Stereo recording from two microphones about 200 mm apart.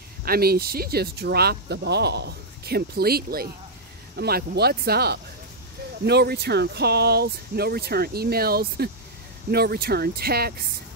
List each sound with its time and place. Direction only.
0.2 s speech: 50° right (ahead or behind)